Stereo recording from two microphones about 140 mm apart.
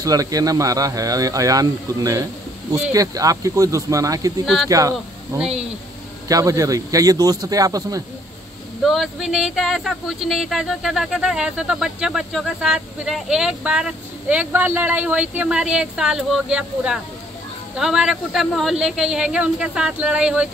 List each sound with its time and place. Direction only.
0.0 s speech: 25° right (ahead or behind)
8.8 s speech: centre (ahead or behind)